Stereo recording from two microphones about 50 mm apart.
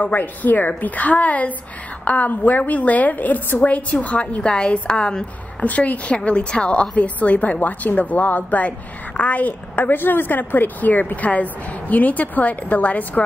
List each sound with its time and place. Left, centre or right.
0.0 s a woman's voice: left; by 5.2 s centre
5.6 s a woman's voice: left